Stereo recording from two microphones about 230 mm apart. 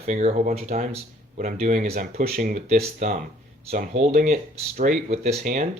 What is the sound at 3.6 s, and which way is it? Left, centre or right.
Speech, right.